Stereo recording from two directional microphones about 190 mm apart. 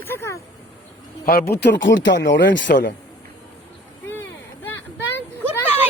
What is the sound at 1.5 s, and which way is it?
Speech, 65° left (ahead or behind).